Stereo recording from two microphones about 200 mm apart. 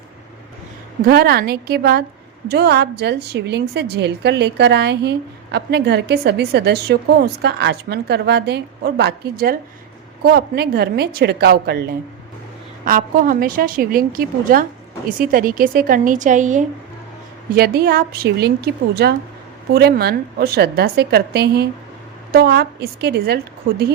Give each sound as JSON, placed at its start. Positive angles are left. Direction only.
{"t": 1.0, "sound": "a woman's voice", "side_deg": -50}
{"t": 12.8, "sound": "a woman's voice", "side_deg": -45}
{"t": 17.5, "sound": "a woman's voice", "side_deg": -50}